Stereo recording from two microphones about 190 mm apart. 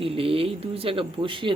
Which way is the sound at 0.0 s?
30° right (ahead or behind).